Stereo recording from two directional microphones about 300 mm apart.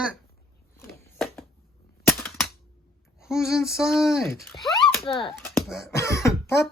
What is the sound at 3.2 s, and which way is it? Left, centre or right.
Speech, centre.